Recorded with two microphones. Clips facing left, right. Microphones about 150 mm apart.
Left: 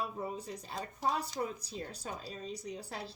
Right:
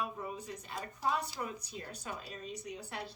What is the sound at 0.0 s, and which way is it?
A woman's voice, 30° left (ahead or behind).